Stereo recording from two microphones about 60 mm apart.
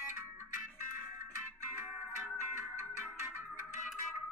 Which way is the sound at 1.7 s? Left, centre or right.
Right.